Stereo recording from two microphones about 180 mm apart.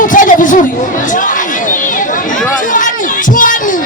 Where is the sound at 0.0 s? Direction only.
45° left (ahead or behind).